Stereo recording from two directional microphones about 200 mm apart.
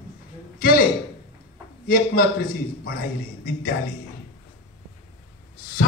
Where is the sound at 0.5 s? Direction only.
45° left (ahead or behind).